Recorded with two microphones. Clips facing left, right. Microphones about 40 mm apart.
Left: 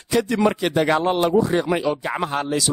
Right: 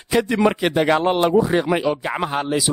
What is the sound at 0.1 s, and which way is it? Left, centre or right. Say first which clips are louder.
A man's voice: right 1 dB; centre.